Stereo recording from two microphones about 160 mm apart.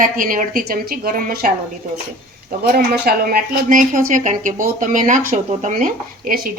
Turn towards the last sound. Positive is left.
turn(degrees=-60)  # may be behind; listen again after turning